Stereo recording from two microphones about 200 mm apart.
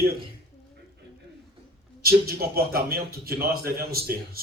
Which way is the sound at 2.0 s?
50° right (ahead or behind).